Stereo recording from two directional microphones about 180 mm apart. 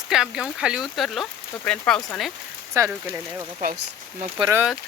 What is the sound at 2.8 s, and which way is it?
Speech, 15° right (ahead or behind).